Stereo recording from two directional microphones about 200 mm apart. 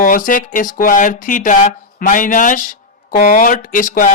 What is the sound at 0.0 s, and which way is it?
Speech, 40° left (ahead or behind).